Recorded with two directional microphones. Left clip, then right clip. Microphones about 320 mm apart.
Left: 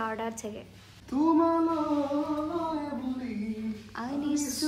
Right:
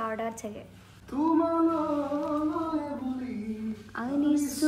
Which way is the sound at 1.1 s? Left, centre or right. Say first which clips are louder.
Left 1 dB; left.